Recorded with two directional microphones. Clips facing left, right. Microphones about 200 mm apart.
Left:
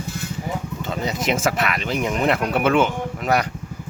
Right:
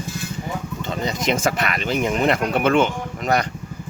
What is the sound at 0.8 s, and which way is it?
Speech, 5° left (ahead or behind).